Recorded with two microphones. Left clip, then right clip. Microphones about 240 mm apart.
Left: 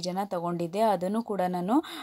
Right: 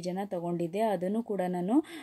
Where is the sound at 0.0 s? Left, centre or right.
Left.